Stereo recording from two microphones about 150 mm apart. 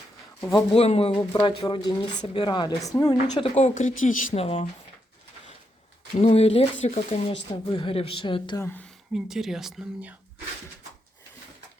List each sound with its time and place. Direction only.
0.7 s a woman's voice: 40° left (ahead or behind)
3.5 s speech: 55° left (ahead or behind)
4.4 s speech: 40° left (ahead or behind)
6.1 s speech: 45° left (ahead or behind)
8.5 s speech: 15° left (ahead or behind)
9.1 s speech: 5° right (ahead or behind)